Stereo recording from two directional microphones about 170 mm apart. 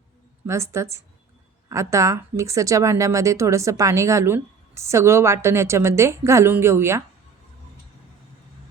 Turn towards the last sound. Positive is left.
turn(degrees=-15)  # may be behind; listen again after turning